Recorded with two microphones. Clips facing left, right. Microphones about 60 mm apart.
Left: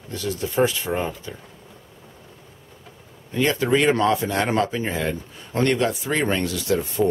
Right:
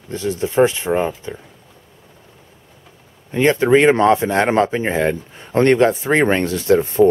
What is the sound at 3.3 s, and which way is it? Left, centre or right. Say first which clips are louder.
Speech: right 7 dB; right.